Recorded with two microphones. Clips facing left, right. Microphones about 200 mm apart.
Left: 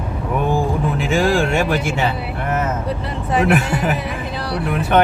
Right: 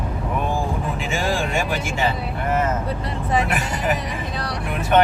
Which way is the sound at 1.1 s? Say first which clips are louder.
Left 7 dB; 65° left (ahead or behind).